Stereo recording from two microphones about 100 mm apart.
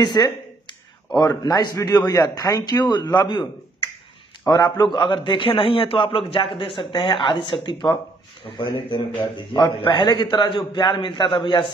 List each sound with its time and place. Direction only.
0.0 s a sound: 45° left (ahead or behind)
1.2 s a man's voice: 35° left (ahead or behind)
4.5 s a man's voice: 40° left (ahead or behind)
4.9 s a man's voice: 55° left (ahead or behind)